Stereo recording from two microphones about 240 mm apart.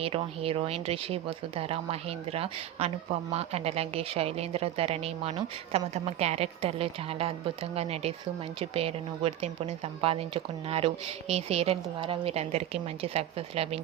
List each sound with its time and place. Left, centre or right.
0.0 s speech: right